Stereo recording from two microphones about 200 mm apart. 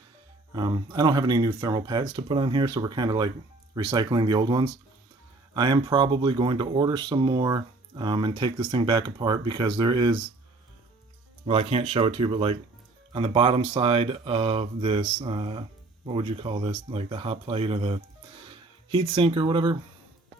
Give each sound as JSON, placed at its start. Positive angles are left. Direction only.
{"t": 0.5, "sound": "speech", "side_deg": -20}
{"t": 11.4, "sound": "speech", "side_deg": -30}